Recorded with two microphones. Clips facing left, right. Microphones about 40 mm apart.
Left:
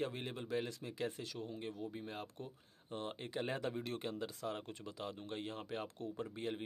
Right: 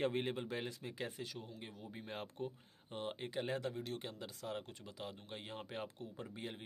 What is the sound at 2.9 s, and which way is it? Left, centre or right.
Speech, centre.